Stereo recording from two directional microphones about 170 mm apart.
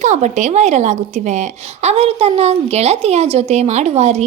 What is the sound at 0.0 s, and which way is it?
A woman's voice, 45° right (ahead or behind).